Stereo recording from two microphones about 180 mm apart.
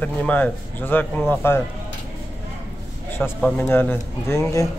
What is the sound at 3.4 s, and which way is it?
A man's voice, 10° left (ahead or behind).